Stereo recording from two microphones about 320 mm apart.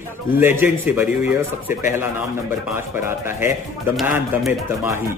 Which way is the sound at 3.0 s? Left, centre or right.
Centre.